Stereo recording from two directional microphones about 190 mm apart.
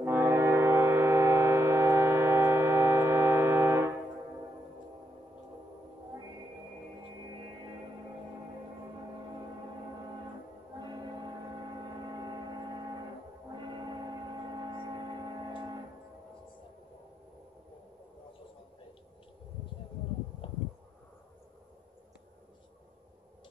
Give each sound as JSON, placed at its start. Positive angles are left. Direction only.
{"t": 0.0, "sound": "music", "side_deg": -10}
{"t": 12.0, "sound": "hum", "side_deg": -20}
{"t": 13.5, "sound": "gong", "side_deg": -25}
{"t": 20.4, "sound": "a sound", "side_deg": 25}